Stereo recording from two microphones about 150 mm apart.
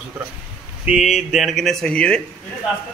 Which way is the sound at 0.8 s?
5° right (ahead or behind).